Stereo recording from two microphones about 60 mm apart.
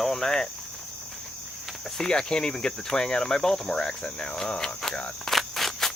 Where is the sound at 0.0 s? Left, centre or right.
Centre.